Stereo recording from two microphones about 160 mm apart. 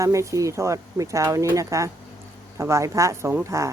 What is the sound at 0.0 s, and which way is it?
Speech, 20° right (ahead or behind).